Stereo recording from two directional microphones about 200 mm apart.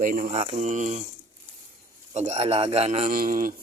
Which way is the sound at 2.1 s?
35° right (ahead or behind).